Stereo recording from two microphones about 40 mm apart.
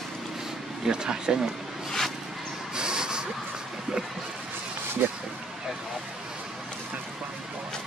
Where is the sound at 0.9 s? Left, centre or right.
Centre.